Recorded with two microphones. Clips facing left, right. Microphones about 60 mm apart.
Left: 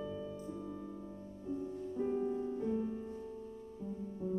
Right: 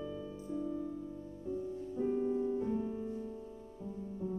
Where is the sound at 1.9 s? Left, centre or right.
Centre.